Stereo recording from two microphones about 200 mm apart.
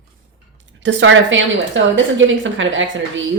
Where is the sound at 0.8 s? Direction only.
65° right (ahead or behind).